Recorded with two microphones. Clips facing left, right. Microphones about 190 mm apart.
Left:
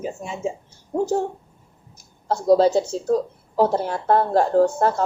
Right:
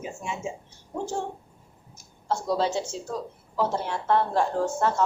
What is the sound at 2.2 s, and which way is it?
Speech, 40° left (ahead or behind).